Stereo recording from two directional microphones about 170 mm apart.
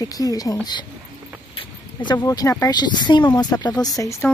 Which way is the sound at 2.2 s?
20° left (ahead or behind).